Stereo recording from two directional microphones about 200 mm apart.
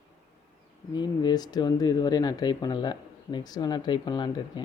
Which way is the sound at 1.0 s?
20° left (ahead or behind).